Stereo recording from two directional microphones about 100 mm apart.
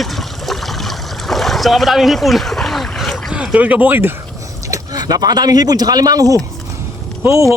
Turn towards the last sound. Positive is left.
turn(degrees=-30)  # may be behind; listen again after turning